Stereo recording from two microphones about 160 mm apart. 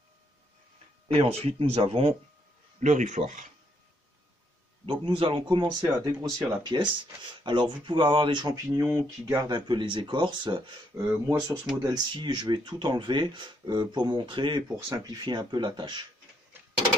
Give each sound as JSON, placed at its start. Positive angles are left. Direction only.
{"t": 1.0, "sound": "speech", "side_deg": -40}
{"t": 2.8, "sound": "speech", "side_deg": -50}
{"t": 4.8, "sound": "speech", "side_deg": -30}
{"t": 11.0, "sound": "speech", "side_deg": -20}